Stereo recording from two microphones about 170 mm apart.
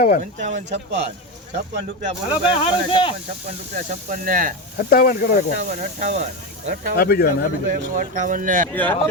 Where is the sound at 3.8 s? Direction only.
50° right (ahead or behind).